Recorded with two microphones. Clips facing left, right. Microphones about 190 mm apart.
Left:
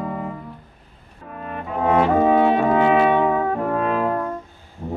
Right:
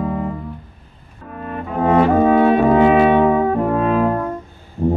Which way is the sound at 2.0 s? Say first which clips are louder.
Right 3 dB; 5° left (ahead or behind).